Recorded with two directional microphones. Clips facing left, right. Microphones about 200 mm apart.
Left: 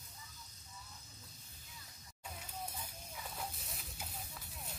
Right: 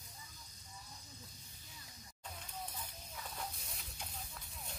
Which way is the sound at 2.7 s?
10° left (ahead or behind).